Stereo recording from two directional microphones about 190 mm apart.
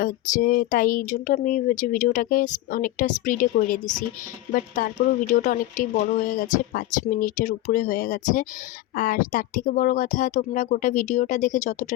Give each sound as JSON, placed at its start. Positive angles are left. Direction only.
{"t": 0.0, "sound": "speech", "side_deg": 45}